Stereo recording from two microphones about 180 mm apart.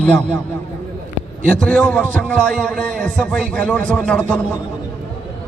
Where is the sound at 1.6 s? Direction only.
5° left (ahead or behind).